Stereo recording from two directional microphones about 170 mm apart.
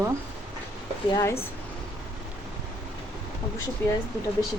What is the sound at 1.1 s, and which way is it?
Speech, 15° left (ahead or behind).